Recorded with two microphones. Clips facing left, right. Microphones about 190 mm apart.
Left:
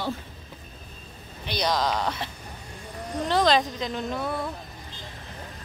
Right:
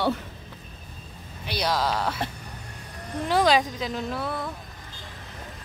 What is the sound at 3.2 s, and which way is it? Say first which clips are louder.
A woman's voice: right 1 dB; 10° right (ahead or behind).